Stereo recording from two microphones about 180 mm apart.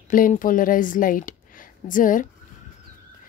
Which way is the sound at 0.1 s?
50° left (ahead or behind).